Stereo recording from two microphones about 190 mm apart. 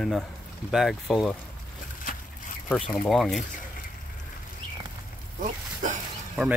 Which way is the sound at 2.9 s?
Centre (ahead or behind).